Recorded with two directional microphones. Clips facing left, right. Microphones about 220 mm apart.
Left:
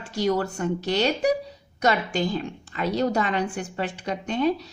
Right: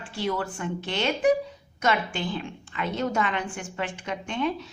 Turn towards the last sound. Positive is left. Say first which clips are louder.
# left 5 dB
turn(degrees=40)  # may be behind; listen again after turning